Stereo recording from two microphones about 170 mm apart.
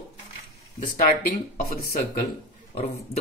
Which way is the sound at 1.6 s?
60° left (ahead or behind).